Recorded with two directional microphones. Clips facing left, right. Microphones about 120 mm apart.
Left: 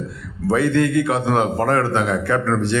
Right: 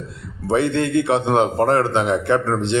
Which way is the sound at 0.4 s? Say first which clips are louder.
Left 2 dB; 25° right (ahead or behind).